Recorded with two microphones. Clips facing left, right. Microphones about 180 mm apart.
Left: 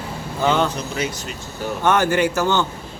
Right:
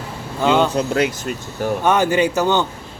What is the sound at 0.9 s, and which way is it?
Speech, 60° right (ahead or behind).